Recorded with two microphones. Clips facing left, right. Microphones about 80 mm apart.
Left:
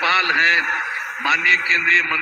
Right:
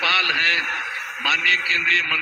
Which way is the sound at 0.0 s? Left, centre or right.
Left.